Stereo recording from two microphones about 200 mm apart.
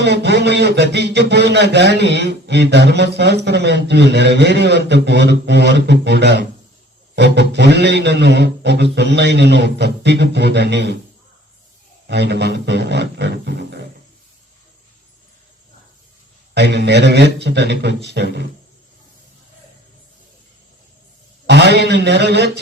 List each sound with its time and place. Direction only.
0.0 s a man's voice: 60° right (ahead or behind)
12.0 s a man's voice: 55° right (ahead or behind)
16.6 s a man's voice: 55° right (ahead or behind)
21.4 s a man's voice: 60° right (ahead or behind)